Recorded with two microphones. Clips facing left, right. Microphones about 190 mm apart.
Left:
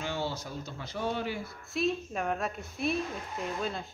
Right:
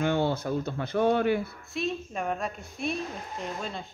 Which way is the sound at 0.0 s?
55° right (ahead or behind).